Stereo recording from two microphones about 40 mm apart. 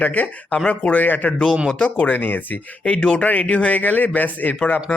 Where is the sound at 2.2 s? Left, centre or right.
Left.